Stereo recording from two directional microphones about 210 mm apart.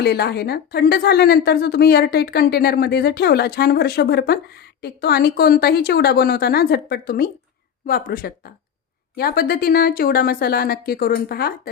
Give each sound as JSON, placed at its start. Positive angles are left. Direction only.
{"t": 0.0, "sound": "a woman's voice", "side_deg": 50}